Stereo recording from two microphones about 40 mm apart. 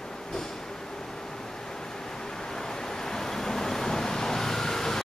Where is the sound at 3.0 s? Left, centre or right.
Centre.